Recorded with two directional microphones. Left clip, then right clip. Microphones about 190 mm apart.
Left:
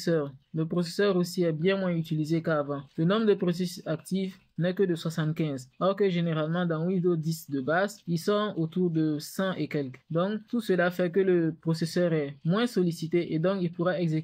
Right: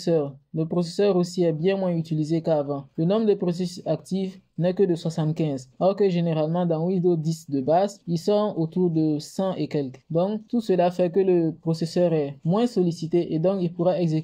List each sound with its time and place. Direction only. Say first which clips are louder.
0.0 s speech: right 5 dB; 15° right (ahead or behind)